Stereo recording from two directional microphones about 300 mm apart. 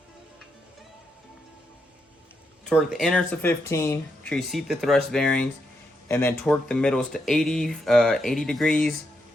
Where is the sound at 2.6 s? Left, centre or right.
Centre.